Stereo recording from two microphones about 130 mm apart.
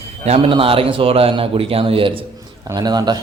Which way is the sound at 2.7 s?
30° right (ahead or behind).